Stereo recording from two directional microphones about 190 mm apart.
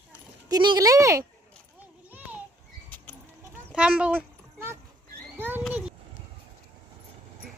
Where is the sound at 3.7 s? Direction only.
5° right (ahead or behind).